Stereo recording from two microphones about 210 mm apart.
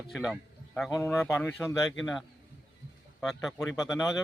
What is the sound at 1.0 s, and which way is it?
Speech, 10° left (ahead or behind).